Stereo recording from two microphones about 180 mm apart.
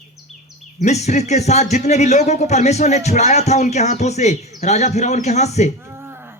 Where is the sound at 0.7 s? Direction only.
40° left (ahead or behind).